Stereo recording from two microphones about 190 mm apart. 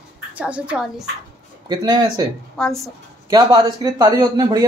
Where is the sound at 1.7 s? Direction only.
25° right (ahead or behind).